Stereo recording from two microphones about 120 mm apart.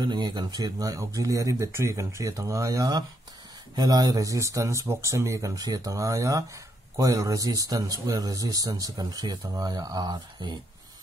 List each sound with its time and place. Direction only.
0.0 s speech: 40° right (ahead or behind)